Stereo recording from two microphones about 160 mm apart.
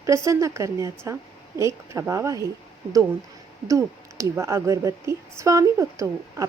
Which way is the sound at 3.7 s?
20° right (ahead or behind).